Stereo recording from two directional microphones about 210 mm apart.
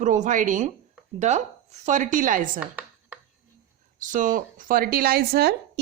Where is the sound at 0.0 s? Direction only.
35° right (ahead or behind).